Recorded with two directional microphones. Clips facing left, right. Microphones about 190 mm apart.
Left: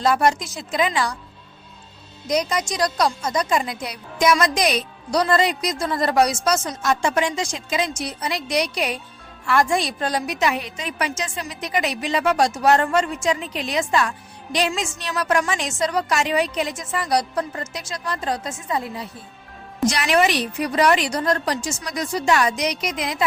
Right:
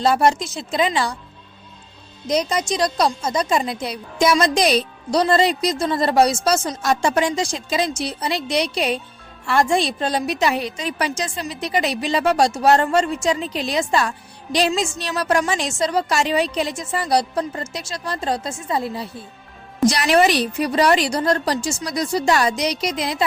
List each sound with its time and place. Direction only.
0.0 s a woman's voice: 30° right (ahead or behind)
2.2 s a woman's voice: 25° right (ahead or behind)